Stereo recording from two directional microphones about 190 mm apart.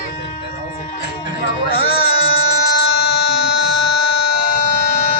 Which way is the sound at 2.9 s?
60° left (ahead or behind).